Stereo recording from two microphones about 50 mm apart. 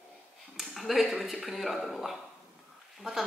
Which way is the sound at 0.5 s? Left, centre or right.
Centre.